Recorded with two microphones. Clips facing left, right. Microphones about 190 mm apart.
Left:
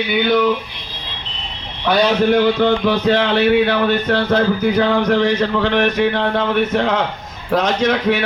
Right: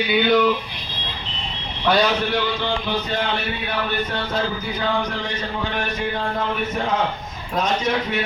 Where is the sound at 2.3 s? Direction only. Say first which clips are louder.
Left 9 dB; 55° left (ahead or behind).